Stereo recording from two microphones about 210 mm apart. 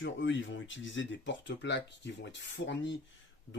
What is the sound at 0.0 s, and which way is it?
Speech, 60° left (ahead or behind).